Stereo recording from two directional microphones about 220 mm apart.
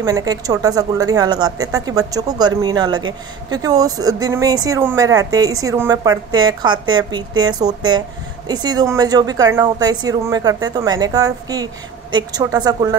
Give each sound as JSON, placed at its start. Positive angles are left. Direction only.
{"t": 0.0, "sound": "speech", "side_deg": -15}